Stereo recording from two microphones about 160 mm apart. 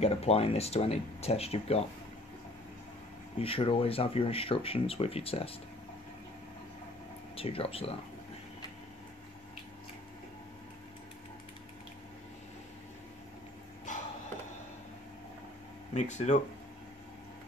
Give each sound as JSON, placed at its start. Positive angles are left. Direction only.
{"t": 0.0, "sound": "speech", "side_deg": 40}
{"t": 3.3, "sound": "speech", "side_deg": 35}
{"t": 7.3, "sound": "speech", "side_deg": 35}
{"t": 15.9, "sound": "speech", "side_deg": 45}